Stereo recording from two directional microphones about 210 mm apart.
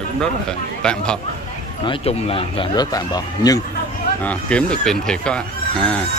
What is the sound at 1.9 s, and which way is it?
Speech, 25° left (ahead or behind).